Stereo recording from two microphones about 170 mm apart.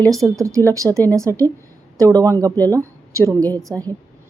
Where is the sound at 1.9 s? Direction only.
20° right (ahead or behind).